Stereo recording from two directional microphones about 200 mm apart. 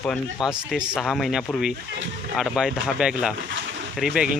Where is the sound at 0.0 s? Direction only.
Centre (ahead or behind).